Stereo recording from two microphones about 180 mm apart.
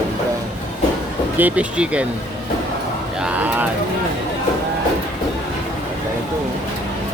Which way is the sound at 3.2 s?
10° right (ahead or behind).